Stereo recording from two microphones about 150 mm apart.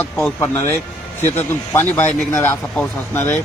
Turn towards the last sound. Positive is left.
turn(degrees=15)  # may be behind; listen again after turning